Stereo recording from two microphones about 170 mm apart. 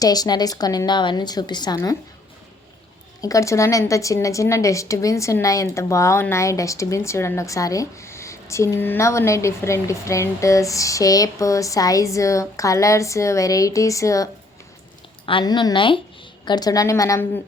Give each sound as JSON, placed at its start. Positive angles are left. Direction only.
{"t": 0.0, "sound": "a woman's voice", "side_deg": 20}
{"t": 3.2, "sound": "a woman's voice", "side_deg": 20}
{"t": 15.3, "sound": "a woman's voice", "side_deg": 30}